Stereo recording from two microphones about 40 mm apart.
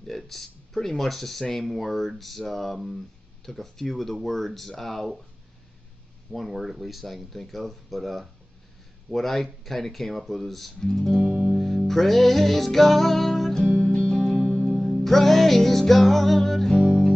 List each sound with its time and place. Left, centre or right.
0.0 s speech: centre
6.3 s speech: centre
11.5 s music: centre
13.7 s music: centre
14.8 s music: centre